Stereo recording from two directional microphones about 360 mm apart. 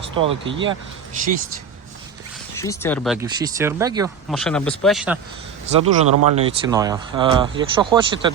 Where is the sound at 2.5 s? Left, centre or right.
Centre.